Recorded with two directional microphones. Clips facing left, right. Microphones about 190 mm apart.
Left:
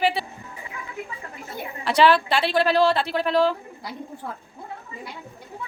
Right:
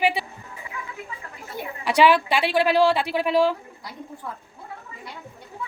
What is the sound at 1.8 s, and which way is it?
Speech, 10° right (ahead or behind).